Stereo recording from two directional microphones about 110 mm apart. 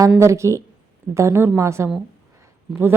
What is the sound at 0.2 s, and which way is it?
A woman's voice, 25° right (ahead or behind).